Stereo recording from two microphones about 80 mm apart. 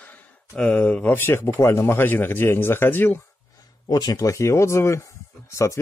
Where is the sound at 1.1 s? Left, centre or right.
Left.